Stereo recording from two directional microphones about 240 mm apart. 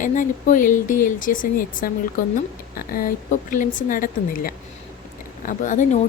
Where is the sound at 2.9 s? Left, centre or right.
Left.